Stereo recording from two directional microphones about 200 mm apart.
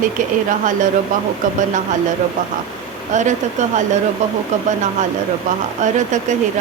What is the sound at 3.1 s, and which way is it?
Speech, 40° right (ahead or behind).